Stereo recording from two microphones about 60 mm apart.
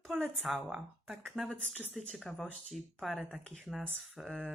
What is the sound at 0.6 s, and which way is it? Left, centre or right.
Speech, centre.